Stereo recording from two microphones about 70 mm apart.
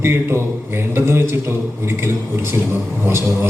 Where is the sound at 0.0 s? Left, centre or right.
Right.